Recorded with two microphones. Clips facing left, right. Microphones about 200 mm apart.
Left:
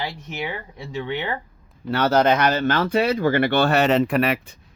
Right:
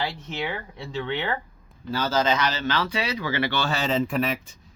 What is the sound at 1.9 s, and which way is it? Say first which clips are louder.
Speech: left 6 dB; 65° left (ahead or behind).